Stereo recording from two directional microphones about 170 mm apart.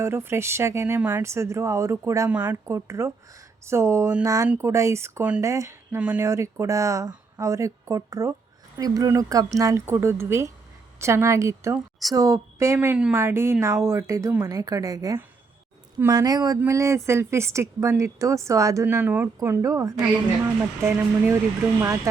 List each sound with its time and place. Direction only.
0.0 s a woman's voice: 15° right (ahead or behind)